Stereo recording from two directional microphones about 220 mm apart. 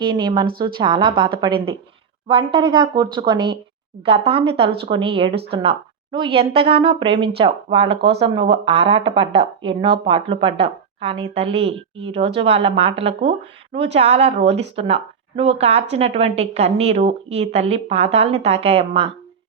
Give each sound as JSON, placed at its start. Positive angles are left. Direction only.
{"t": 0.0, "sound": "speech", "side_deg": -20}